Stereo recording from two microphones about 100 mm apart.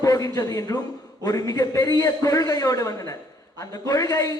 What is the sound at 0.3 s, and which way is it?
A man's voice, 35° left (ahead or behind).